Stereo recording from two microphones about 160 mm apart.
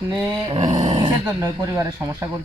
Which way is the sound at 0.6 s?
25° right (ahead or behind).